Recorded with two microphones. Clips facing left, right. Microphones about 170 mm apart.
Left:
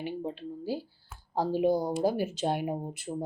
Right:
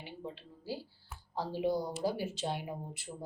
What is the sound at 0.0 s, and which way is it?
Speech, 50° left (ahead or behind).